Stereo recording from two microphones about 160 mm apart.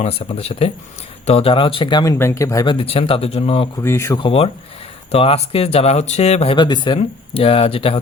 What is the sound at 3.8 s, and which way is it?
Speech, 15° left (ahead or behind).